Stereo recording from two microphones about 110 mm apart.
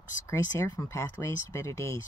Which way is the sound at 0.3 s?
35° left (ahead or behind).